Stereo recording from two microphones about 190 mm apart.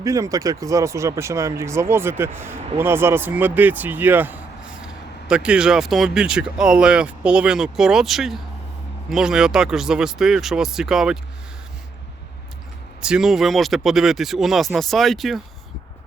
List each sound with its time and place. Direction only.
0.0 s speech: 15° right (ahead or behind)
13.0 s speech: 5° right (ahead or behind)